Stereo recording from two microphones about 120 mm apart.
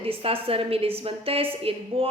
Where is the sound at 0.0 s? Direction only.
50° right (ahead or behind).